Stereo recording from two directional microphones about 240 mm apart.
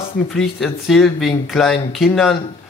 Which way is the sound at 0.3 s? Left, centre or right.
Centre.